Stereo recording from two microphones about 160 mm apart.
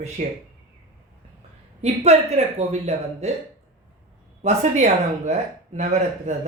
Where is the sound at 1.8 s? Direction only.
40° right (ahead or behind).